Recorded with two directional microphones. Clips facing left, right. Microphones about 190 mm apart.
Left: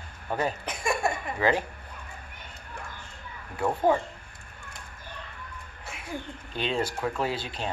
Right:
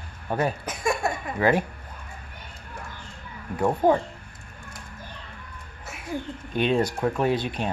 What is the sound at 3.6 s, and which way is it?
Speech, 15° right (ahead or behind).